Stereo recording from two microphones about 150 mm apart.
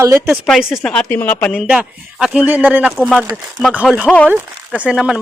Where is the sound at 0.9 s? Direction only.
10° left (ahead or behind).